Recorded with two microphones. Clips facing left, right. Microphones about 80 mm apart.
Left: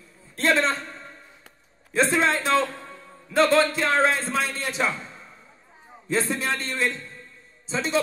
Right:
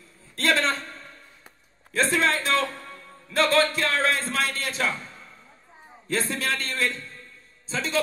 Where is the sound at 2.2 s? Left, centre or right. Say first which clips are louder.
Left 2 dB; left.